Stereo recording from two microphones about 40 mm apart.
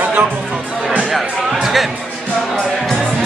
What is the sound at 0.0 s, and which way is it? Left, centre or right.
Chatter, right.